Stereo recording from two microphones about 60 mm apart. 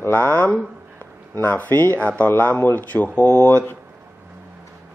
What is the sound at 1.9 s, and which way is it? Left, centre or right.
Mantra, left.